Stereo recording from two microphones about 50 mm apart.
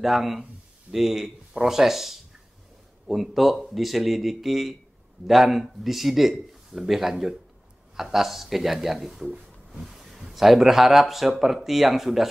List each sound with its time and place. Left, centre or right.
0.0 s speech: centre